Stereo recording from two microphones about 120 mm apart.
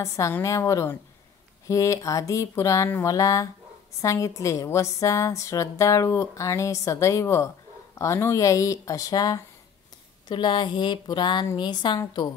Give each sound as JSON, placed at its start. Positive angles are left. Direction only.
{"t": 0.0, "sound": "a woman's voice", "side_deg": 25}